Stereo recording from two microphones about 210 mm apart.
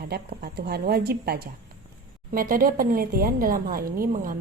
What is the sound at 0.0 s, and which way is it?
A woman's voice, 50° right (ahead or behind).